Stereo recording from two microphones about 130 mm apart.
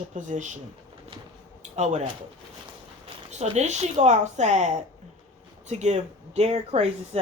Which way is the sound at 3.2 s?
60° right (ahead or behind).